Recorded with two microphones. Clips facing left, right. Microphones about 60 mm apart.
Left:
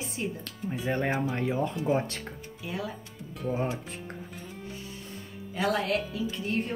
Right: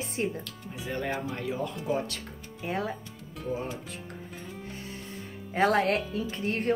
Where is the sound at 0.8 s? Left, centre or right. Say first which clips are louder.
Left 3 dB; left.